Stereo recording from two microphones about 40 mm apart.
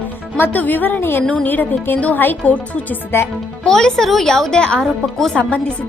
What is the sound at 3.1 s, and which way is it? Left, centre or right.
Speech, left.